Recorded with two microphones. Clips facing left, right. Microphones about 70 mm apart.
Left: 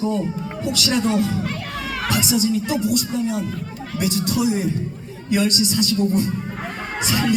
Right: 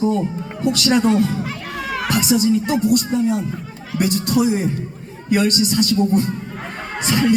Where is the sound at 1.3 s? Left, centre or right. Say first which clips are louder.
Even; centre.